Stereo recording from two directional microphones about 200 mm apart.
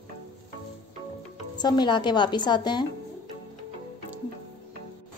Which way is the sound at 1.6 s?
20° left (ahead or behind).